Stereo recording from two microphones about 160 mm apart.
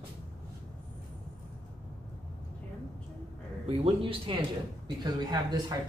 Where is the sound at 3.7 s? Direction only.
35° right (ahead or behind).